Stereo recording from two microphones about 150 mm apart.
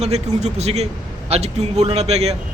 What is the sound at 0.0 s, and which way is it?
A man's voice, 45° right (ahead or behind).